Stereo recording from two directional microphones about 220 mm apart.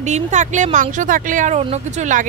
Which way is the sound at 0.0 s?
35° right (ahead or behind).